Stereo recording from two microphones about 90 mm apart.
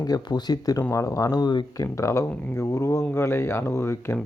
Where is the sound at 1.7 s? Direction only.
35° left (ahead or behind).